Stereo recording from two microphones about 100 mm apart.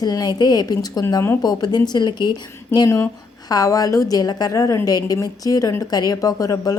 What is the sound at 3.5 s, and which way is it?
Speech, 35° left (ahead or behind).